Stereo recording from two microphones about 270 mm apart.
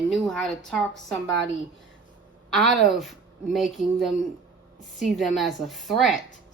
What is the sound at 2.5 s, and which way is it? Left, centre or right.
A woman's voice, centre.